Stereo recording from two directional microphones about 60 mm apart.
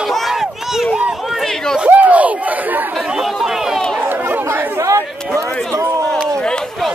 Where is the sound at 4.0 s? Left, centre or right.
Right.